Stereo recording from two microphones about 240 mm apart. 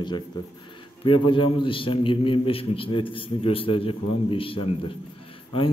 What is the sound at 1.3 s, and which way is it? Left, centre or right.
A man's voice, left.